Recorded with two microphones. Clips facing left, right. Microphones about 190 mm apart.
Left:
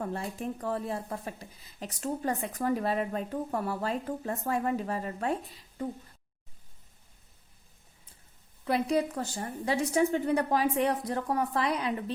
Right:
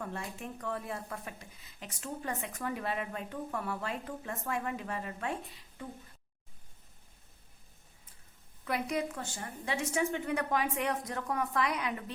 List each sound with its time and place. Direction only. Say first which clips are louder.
0.0 s speech: left 6 dB; 35° left (ahead or behind)
8.6 s speech: left 6 dB; 30° left (ahead or behind)